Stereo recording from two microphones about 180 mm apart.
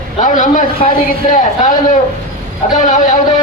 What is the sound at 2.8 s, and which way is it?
Speech, 45° left (ahead or behind).